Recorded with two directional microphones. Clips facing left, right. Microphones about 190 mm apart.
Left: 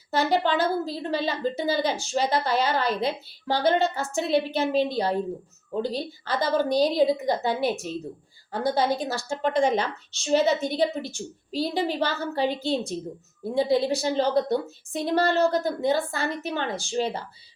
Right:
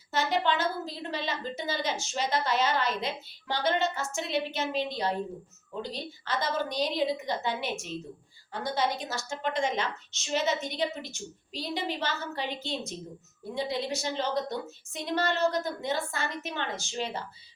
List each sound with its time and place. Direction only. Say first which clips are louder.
0.1 s a woman's voice: left 5 dB; 35° left (ahead or behind)